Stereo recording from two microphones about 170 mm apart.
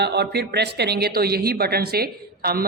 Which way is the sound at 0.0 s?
75° right (ahead or behind).